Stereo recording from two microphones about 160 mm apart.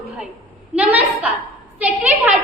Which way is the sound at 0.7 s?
10° right (ahead or behind).